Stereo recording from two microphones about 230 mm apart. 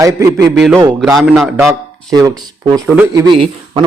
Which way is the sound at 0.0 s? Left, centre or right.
Centre.